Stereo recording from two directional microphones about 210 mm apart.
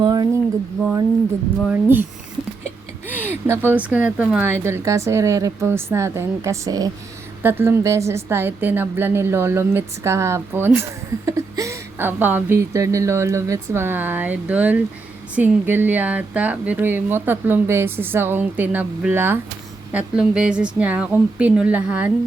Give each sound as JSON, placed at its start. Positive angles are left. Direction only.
{"t": 0.0, "sound": "a sound", "side_deg": -20}
{"t": 0.8, "sound": "speech", "side_deg": -5}
{"t": 3.1, "sound": "speech", "side_deg": -10}